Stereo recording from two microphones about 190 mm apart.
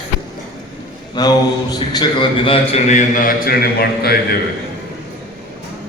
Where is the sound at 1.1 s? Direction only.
20° left (ahead or behind); by 4.2 s 55° left (ahead or behind).